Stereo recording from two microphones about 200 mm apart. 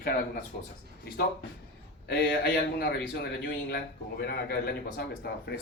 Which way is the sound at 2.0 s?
55° left (ahead or behind).